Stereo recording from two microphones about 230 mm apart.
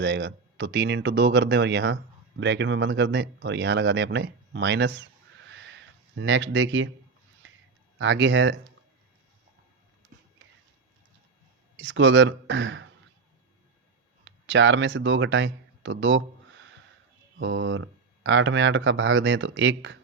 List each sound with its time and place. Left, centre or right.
0.0 s speech: right
5.5 s a sound: right
7.9 s speech: right
11.8 s speech: right
14.3 s speech: right